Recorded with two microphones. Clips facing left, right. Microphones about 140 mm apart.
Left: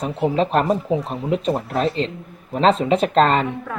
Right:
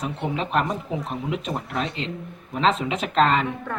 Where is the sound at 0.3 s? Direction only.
35° left (ahead or behind).